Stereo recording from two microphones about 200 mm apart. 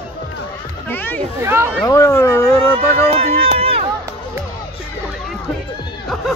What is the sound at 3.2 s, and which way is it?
Run, 30° right (ahead or behind).